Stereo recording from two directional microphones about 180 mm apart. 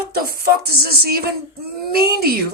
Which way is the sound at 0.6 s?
60° right (ahead or behind).